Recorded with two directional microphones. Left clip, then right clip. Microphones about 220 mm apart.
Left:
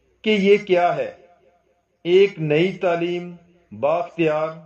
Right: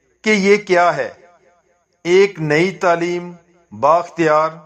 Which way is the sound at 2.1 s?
20° right (ahead or behind).